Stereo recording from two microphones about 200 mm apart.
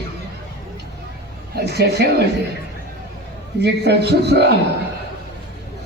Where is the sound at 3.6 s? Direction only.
55° right (ahead or behind).